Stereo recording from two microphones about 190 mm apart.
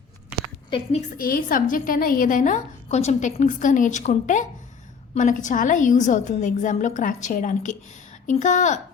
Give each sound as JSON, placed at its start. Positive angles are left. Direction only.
{"t": 1.1, "sound": "a woman's voice", "side_deg": 50}